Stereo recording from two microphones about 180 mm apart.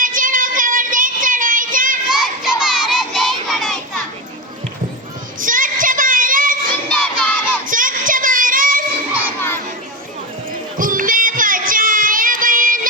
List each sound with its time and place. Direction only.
0.0 s child singing: 50° right (ahead or behind)
2.0 s child singing: 5° right (ahead or behind)
5.4 s child singing: 50° right (ahead or behind)
6.9 s crowd: 10° left (ahead or behind)
7.7 s child singing: 50° right (ahead or behind)
10.8 s child singing: 50° right (ahead or behind)